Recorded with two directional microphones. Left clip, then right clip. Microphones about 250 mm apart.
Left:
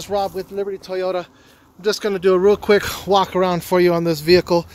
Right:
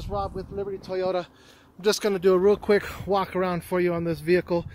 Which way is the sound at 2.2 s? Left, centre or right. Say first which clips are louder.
Left 7 dB; centre.